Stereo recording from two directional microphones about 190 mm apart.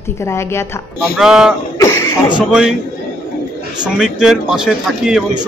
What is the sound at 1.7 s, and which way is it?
Speech, 20° left (ahead or behind).